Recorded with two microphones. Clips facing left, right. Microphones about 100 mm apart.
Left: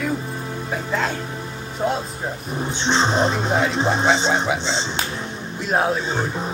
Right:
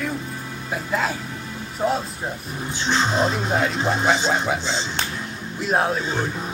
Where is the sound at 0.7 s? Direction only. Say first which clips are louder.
Even; 5° right (ahead or behind).